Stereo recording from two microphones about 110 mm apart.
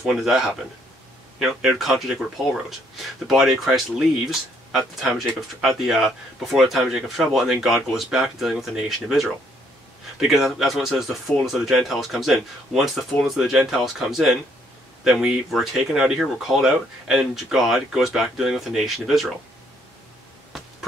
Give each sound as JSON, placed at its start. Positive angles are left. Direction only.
{"t": 0.0, "sound": "speech", "side_deg": 0}